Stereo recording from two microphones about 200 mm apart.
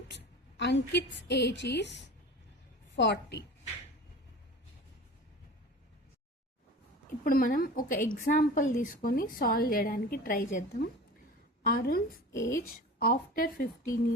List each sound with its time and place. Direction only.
0.1 s a woman's voice: 60° left (ahead or behind)
7.3 s a woman's voice: 45° left (ahead or behind)
12.3 s speech: 15° left (ahead or behind)
12.6 s a woman's voice: 45° left (ahead or behind)